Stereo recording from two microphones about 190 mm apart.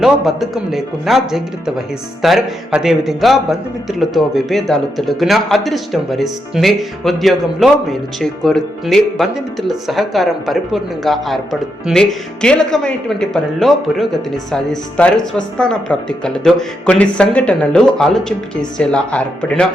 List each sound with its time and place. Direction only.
0.0 s speech: centre (ahead or behind)